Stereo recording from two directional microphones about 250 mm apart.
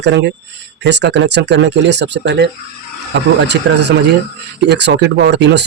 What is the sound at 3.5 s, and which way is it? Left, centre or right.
A man's voice, right.